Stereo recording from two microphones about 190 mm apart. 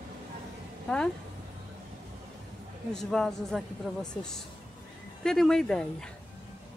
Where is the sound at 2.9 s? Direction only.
Centre (ahead or behind).